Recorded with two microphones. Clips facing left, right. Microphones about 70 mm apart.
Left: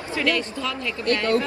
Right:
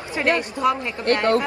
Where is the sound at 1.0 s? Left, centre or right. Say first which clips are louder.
Right 3 dB; right.